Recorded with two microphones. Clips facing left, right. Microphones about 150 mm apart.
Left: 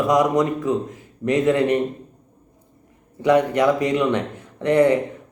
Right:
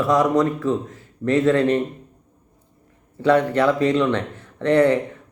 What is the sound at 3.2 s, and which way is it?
A man's voice, 15° left (ahead or behind).